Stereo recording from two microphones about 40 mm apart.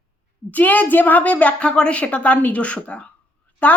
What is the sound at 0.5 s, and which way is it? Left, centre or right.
A woman's voice, left.